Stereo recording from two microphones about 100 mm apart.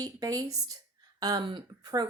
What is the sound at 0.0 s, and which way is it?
A woman's voice, 35° right (ahead or behind).